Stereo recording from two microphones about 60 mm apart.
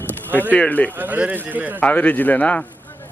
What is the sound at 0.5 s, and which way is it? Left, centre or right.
Speech, left.